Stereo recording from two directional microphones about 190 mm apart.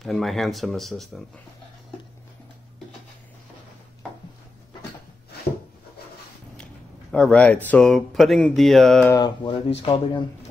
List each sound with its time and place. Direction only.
0.0 s speech: centre (ahead or behind)
6.5 s speech: 5° left (ahead or behind)
9.1 s speech: 25° left (ahead or behind)